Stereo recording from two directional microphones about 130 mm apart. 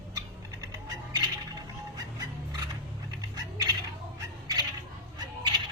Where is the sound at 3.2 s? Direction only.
30° right (ahead or behind).